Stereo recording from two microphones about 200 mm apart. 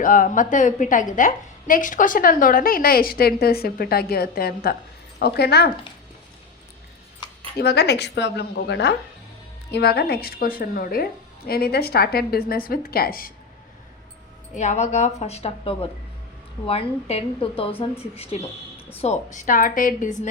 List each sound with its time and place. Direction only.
0.0 s a woman's voice: 45° left (ahead or behind)
7.6 s a woman's voice: 55° left (ahead or behind)
14.5 s a woman's voice: 35° left (ahead or behind)